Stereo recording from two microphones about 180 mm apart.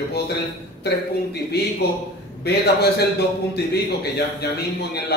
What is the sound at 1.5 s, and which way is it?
A man's voice, 65° left (ahead or behind).